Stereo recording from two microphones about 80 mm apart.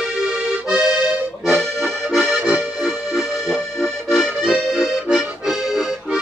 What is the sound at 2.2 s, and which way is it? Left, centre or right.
Music, centre.